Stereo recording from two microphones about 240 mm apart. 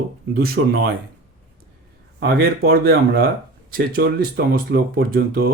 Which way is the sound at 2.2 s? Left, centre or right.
Right.